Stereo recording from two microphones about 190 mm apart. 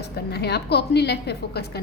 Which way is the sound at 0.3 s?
60° left (ahead or behind).